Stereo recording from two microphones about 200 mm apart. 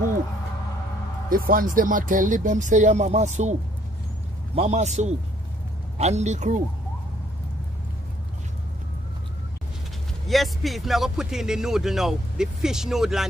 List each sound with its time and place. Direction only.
1.3 s speech: 45° right (ahead or behind)
4.6 s speech: 35° right (ahead or behind)
10.2 s speech: centre (ahead or behind)